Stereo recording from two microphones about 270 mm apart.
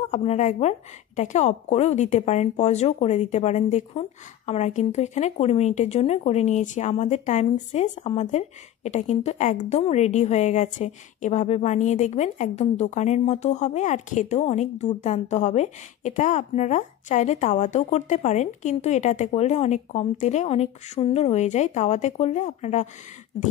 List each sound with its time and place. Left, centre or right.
0.1 s speech: left